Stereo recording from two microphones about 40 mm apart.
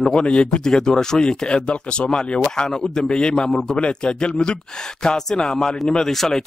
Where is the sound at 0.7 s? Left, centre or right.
Centre.